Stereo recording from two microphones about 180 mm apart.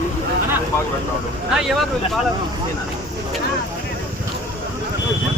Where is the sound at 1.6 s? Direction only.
Centre (ahead or behind).